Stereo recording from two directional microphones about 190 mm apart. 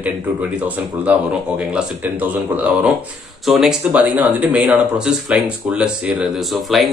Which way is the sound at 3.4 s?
Centre (ahead or behind).